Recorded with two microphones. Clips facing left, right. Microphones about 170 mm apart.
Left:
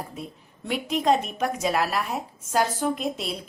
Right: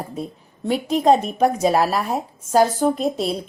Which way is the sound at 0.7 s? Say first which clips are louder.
Right 6 dB; 35° right (ahead or behind).